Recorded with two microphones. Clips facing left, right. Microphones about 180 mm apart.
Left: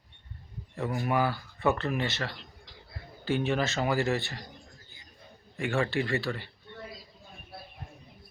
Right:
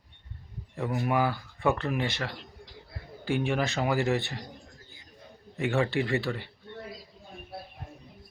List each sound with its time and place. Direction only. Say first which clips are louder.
1.0 s speech: right 1 dB; 15° right (ahead or behind)
5.5 s speech: right 2 dB; 20° right (ahead or behind)